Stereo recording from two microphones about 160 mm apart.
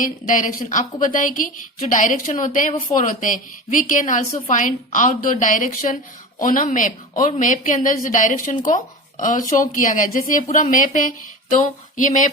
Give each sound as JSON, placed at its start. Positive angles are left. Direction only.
{"t": 0.0, "sound": "speech", "side_deg": 55}